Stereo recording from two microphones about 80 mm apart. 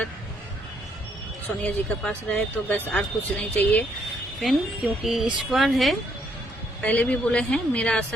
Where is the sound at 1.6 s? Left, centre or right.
Centre.